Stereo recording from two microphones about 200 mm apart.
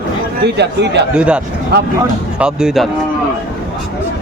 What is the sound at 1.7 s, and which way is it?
Speech, 55° right (ahead or behind).